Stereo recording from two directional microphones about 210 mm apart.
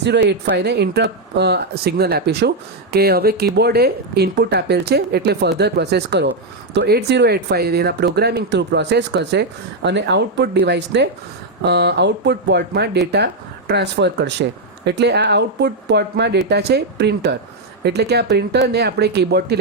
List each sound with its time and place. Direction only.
0.0 s speech: 55° right (ahead or behind)